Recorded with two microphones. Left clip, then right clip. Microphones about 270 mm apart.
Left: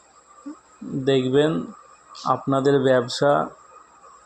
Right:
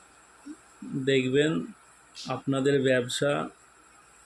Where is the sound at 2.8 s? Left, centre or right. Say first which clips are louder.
Left 6 dB; left.